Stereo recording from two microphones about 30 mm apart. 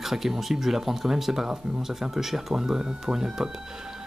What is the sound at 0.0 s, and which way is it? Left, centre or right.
Speech, centre.